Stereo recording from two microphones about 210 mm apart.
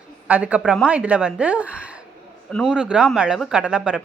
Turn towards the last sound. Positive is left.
turn(degrees=-5)  # may be behind; listen again after turning